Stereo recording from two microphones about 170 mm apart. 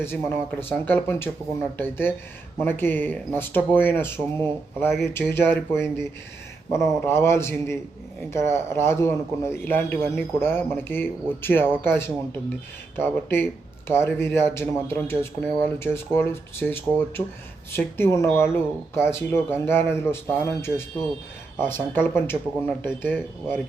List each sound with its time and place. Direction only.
0.0 s speech: 15° left (ahead or behind)